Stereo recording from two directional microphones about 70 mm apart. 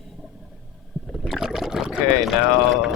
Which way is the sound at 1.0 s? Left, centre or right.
Centre.